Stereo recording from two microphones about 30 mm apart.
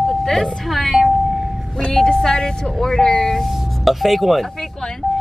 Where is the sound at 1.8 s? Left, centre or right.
Left.